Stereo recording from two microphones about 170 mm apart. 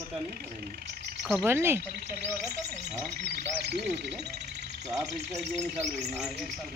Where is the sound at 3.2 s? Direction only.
70° right (ahead or behind).